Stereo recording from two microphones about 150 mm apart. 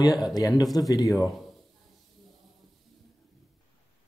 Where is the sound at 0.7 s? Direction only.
25° left (ahead or behind).